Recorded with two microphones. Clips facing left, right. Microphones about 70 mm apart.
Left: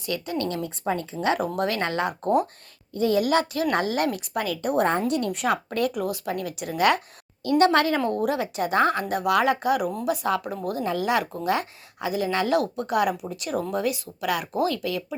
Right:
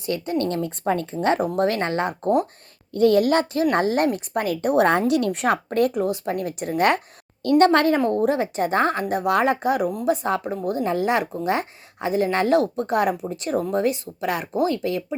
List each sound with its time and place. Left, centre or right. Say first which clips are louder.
0.0 s speech: right 4 dB; right
1.5 s speech: right 4 dB; right
2.9 s a woman's voice: right 5 dB; right
3.2 s speech: right 3 dB; right
4.8 s a woman's voice: right 4 dB; right
5.3 s speech: right 3 dB; right
7.9 s speech: right 4 dB; right